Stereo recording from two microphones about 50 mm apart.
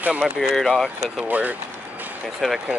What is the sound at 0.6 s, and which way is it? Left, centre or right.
Speech, centre.